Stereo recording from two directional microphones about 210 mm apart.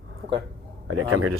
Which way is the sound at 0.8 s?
90° right.